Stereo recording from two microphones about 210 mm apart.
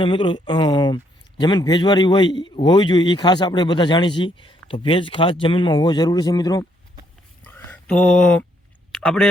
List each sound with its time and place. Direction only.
0.0 s a man's voice: 25° left (ahead or behind)
7.4 s a sound: 5° left (ahead or behind)
9.0 s speech: 5° left (ahead or behind)